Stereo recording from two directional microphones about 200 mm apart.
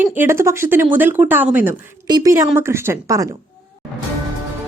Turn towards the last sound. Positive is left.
turn(degrees=-15)  # may be behind; listen again after turning